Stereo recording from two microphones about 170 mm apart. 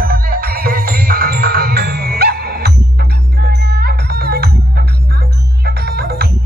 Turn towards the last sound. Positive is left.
turn(degrees=-65)  # may be behind; listen again after turning